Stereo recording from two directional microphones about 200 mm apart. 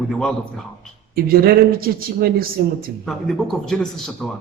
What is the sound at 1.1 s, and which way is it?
Speech, 50° right (ahead or behind).